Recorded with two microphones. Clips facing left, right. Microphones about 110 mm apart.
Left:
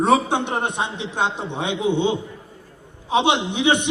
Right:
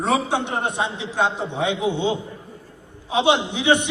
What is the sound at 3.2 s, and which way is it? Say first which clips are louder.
Speech: right 4 dB; 20° left (ahead or behind).